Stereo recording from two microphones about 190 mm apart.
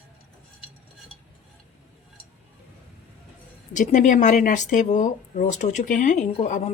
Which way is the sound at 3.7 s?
40° left (ahead or behind).